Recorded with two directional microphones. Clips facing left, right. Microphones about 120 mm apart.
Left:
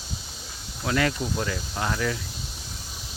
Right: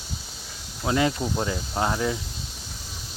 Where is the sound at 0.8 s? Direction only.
20° right (ahead or behind).